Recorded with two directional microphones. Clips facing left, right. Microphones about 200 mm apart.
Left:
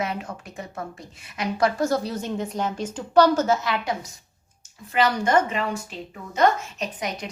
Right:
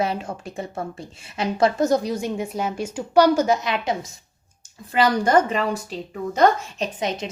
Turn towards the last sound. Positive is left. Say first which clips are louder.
# right 4 dB
turn(degrees=-25)  # may be behind; listen again after turning